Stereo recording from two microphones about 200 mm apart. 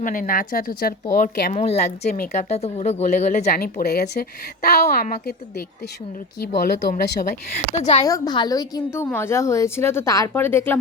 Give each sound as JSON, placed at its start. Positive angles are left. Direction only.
{"t": 0.0, "sound": "a woman's voice", "side_deg": 40}
{"t": 1.5, "sound": "speech", "side_deg": 30}
{"t": 2.1, "sound": "a woman's voice", "side_deg": 45}
{"t": 2.5, "sound": "speech", "side_deg": 30}
{"t": 3.6, "sound": "a woman's voice", "side_deg": 50}
{"t": 7.7, "sound": "speech", "side_deg": 35}
{"t": 8.0, "sound": "a woman's voice", "side_deg": 20}